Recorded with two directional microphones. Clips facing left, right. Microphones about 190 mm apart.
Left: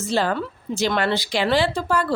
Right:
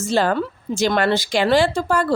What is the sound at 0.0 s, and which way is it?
A woman's voice, 50° right (ahead or behind).